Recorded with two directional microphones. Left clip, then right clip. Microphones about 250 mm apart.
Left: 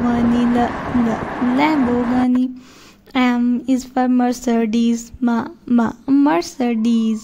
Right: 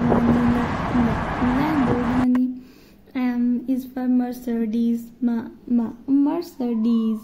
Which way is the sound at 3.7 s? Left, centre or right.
Left.